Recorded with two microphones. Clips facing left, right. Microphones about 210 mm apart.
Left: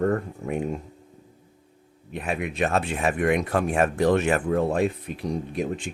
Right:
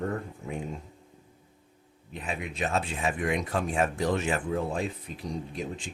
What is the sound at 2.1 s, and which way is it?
Speech, 60° left (ahead or behind).